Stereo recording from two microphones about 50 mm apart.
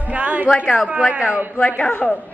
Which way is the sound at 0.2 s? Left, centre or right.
Right.